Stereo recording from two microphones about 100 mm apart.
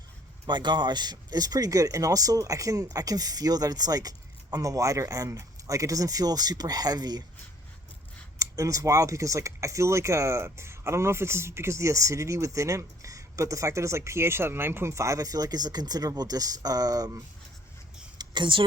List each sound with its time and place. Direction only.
0.4 s speech: 50° right (ahead or behind)
8.4 s speech: 30° right (ahead or behind)
18.2 s a sound: 50° right (ahead or behind)